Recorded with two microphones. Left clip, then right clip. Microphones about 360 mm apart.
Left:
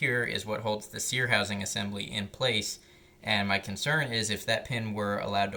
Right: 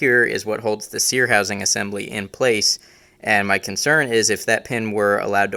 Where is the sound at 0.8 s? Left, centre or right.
Centre.